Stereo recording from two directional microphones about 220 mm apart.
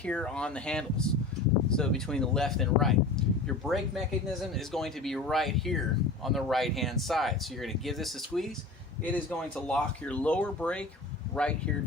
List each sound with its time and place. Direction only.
0.0 s speech: 5° left (ahead or behind)